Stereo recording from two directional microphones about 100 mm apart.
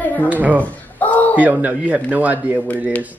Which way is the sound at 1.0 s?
15° left (ahead or behind).